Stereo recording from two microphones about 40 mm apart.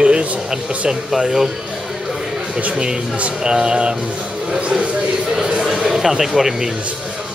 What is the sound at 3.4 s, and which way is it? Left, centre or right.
Speech, centre.